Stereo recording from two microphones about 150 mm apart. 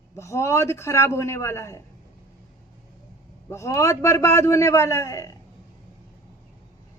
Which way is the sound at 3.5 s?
20° left (ahead or behind).